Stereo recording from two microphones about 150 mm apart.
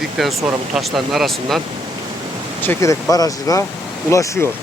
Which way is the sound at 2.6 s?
15° left (ahead or behind).